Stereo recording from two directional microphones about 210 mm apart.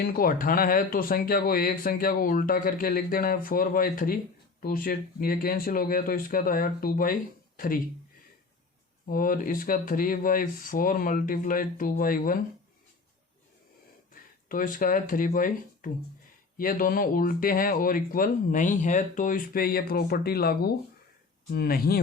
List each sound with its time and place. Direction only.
0.0 s speech: 45° left (ahead or behind)
9.0 s speech: 40° left (ahead or behind)
14.1 s speech: 40° left (ahead or behind)